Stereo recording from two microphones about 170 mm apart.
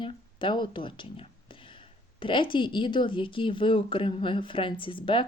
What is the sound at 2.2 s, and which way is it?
Speech, 30° left (ahead or behind).